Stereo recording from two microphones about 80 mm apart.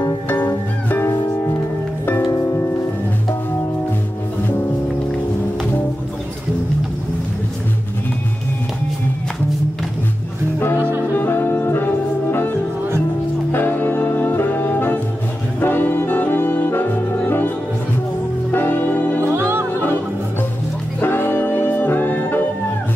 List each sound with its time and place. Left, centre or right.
0.3 s music: left
10.8 s music: right
11.1 s music: left
13.5 s music: left
15.6 s brass instrument: left
18.5 s music: left
21.0 s music: left